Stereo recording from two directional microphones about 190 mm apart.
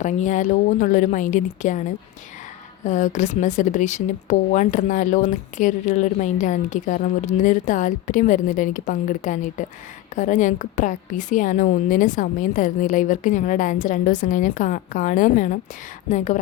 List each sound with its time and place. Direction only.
0.0 s speech: 40° left (ahead or behind)
2.8 s a woman's voice: 40° left (ahead or behind)